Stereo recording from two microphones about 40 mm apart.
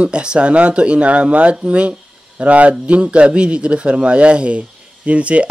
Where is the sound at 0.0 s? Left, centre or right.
Right.